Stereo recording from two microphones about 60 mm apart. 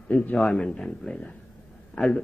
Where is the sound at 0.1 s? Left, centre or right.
Left.